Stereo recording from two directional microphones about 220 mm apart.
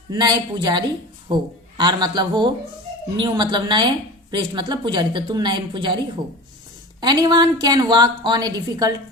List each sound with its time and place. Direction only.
0.1 s a woman's voice: 20° right (ahead or behind)
7.0 s a woman's voice: 20° right (ahead or behind)